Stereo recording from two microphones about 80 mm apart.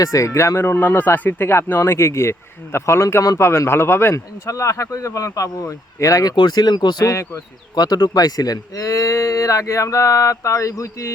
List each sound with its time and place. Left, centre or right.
0.0 s speech: left
4.1 s speech: left
6.3 s speech: left
7.0 s speech: left
7.8 s speech: left